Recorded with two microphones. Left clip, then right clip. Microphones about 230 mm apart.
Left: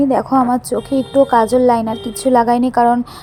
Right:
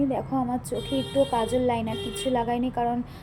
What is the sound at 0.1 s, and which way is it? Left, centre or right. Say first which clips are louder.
A woman's voice: left 14 dB; left.